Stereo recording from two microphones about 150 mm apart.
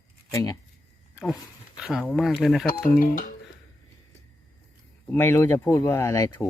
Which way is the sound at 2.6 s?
65° left (ahead or behind).